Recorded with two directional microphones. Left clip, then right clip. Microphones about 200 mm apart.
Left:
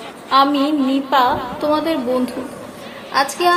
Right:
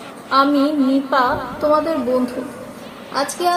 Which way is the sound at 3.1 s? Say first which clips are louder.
Left 3 dB; 35° left (ahead or behind).